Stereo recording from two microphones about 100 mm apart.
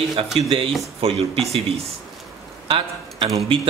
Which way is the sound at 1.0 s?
80° right.